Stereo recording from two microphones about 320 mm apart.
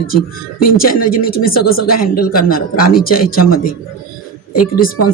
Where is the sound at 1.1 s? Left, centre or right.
Left.